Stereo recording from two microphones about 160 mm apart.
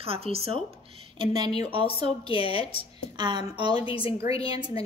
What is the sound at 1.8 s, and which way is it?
A woman's voice, 35° left (ahead or behind).